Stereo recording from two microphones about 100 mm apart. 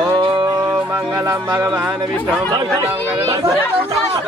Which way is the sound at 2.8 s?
30° right (ahead or behind).